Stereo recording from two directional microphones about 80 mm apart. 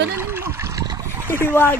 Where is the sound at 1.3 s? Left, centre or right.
Left.